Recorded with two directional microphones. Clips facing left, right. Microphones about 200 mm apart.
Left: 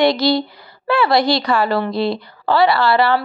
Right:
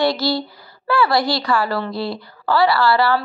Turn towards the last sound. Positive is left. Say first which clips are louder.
# left 1 dB
turn(degrees=20)  # may be behind; listen again after turning